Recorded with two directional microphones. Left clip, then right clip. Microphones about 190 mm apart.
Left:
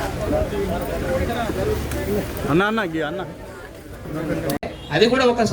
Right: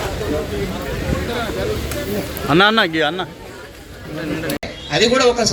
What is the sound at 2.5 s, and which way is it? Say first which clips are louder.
Speech: right 7 dB; 20° right (ahead or behind).